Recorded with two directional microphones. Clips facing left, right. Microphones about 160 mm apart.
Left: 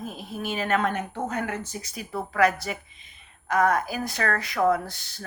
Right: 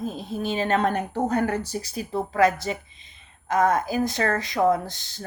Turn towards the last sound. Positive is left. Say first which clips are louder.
# right 2 dB
turn(degrees=-20)  # may be behind; listen again after turning